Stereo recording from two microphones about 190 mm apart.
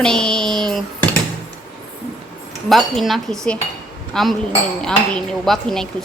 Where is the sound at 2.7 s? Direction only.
Centre (ahead or behind).